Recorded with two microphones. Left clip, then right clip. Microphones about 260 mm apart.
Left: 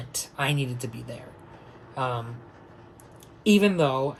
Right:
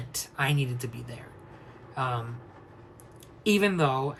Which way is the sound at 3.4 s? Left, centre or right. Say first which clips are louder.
Left 3 dB; centre.